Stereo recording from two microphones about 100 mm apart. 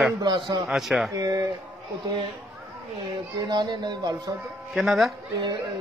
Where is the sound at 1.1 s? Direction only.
35° right (ahead or behind).